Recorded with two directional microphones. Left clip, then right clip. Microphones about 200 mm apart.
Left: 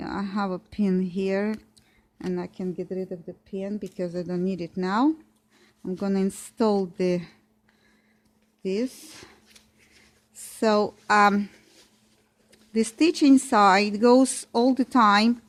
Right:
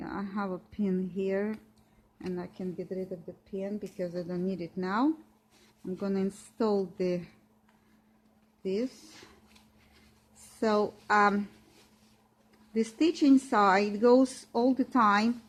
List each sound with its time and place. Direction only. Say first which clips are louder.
0.0 s speech: left 6 dB; 45° left (ahead or behind)
8.6 s speech: left 4 dB; 50° left (ahead or behind)
10.6 s speech: left 6 dB; 45° left (ahead or behind)
12.7 s speech: left 6 dB; 45° left (ahead or behind)